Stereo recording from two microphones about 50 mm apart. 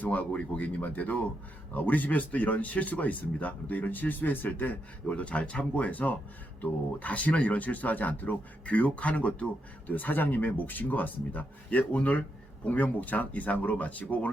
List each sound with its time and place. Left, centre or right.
0.0 s speech: left